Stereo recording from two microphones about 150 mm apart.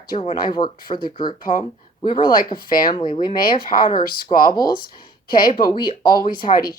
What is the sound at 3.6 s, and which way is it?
Speech, 70° left (ahead or behind).